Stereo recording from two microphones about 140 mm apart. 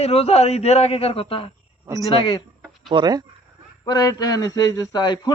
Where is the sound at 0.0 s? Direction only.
45° left (ahead or behind).